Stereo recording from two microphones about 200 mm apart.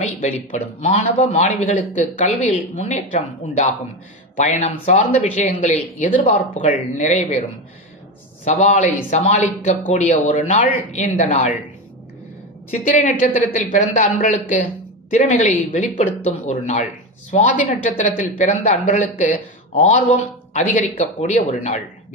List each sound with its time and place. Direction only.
0.0 s a man's voice: 35° left (ahead or behind)
8.5 s a man's voice: 35° left (ahead or behind)
12.8 s a man's voice: 35° left (ahead or behind)